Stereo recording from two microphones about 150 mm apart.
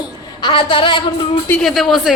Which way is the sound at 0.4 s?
30° left (ahead or behind).